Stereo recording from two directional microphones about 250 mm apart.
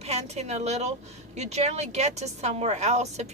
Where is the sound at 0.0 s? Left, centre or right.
Right.